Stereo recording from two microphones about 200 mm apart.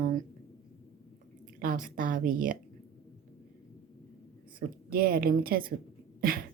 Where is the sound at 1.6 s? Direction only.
40° right (ahead or behind).